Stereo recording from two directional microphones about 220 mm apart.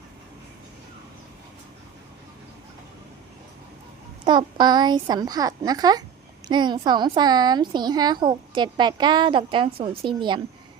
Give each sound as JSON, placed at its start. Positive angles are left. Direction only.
{"t": 4.3, "sound": "a woman's voice", "side_deg": -20}